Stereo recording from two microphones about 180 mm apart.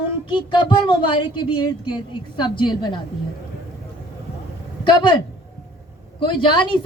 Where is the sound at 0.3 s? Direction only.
25° left (ahead or behind).